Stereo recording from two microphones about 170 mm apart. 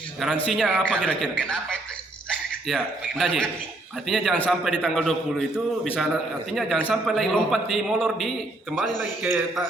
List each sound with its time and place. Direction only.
0.5 s a man's voice: 5° left (ahead or behind)
2.6 s a man's voice: centre (ahead or behind)
9.0 s a man's voice: 10° right (ahead or behind)